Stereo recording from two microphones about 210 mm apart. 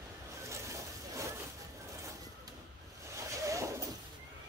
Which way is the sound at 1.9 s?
15° right (ahead or behind).